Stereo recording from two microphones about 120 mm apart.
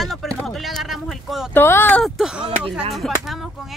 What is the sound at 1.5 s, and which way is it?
Speech, 20° left (ahead or behind).